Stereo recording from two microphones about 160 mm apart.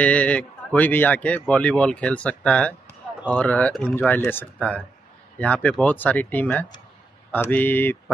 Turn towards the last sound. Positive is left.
turn(degrees=15)  # may be behind; listen again after turning